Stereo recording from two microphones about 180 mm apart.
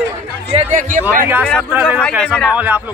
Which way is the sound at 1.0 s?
10° right (ahead or behind).